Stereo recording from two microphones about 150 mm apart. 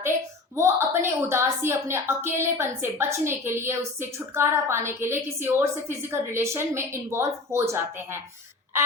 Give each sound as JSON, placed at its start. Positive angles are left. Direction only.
{"t": 0.5, "sound": "a woman's voice", "side_deg": -15}